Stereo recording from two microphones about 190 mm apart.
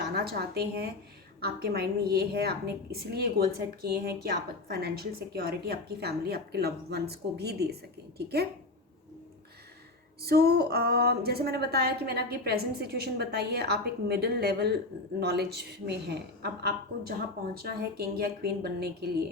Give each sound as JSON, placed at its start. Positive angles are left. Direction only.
{"t": 0.0, "sound": "a woman's voice", "side_deg": -55}
{"t": 10.2, "sound": "a woman's voice", "side_deg": -55}